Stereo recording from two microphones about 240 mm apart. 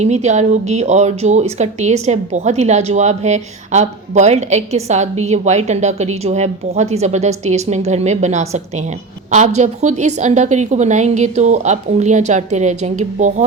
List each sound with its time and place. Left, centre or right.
0.0 s speech: right